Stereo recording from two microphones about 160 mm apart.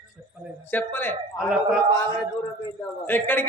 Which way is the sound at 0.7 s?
10° left (ahead or behind).